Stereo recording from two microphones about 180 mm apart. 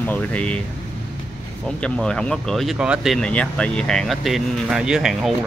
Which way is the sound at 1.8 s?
5° left (ahead or behind).